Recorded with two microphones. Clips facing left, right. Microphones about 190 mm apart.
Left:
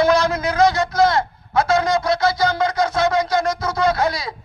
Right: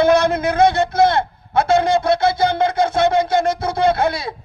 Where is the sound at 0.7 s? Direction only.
25° right (ahead or behind).